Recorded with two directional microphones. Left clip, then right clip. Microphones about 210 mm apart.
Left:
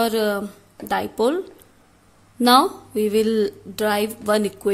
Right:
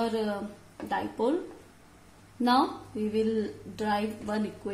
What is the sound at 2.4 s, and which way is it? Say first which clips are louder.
A woman's voice: left 10 dB; 50° left (ahead or behind).